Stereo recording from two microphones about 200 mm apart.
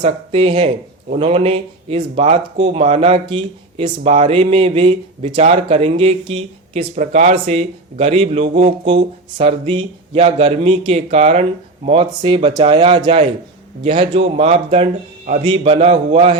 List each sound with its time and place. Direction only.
0.0 s speech: 30° right (ahead or behind)
15.4 s speech: 30° right (ahead or behind)